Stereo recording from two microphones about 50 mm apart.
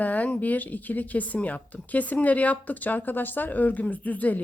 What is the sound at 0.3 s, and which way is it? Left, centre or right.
Speech, left.